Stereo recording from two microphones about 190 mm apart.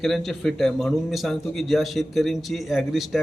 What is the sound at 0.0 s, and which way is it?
A man's voice, centre (ahead or behind).